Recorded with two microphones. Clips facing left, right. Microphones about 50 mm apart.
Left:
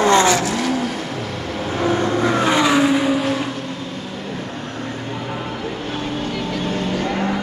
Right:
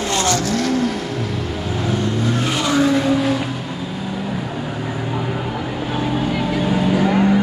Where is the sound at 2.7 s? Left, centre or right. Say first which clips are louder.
Even; left.